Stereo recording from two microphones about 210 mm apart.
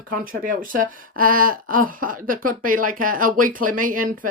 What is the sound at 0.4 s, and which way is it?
Speech, 40° right (ahead or behind).